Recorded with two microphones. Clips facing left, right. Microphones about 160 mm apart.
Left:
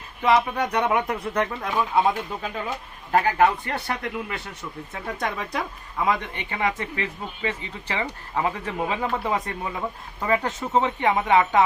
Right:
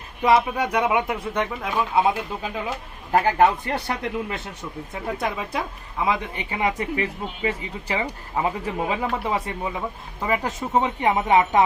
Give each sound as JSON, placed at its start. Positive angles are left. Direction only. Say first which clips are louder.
{"t": 0.2, "sound": "a woman's voice", "louder": "right 1 dB", "side_deg": -10}
{"t": 3.1, "sound": "speech", "louder": "right 1 dB", "side_deg": -20}
{"t": 5.1, "sound": "a woman's voice", "louder": "right 1 dB", "side_deg": -5}
{"t": 9.0, "sound": "a woman's voice", "louder": "even", "side_deg": -5}